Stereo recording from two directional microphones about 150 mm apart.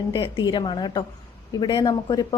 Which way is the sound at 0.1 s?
35° left (ahead or behind).